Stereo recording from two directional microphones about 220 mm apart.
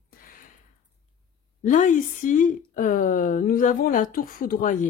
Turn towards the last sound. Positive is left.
turn(degrees=35)  # may be behind; listen again after turning